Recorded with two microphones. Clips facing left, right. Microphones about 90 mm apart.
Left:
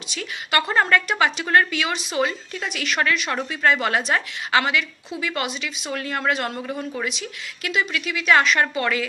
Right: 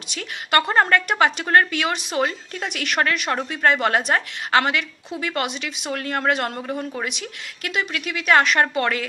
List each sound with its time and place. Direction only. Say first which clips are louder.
0.1 s a woman's voice: right 3 dB; 50° right (ahead or behind)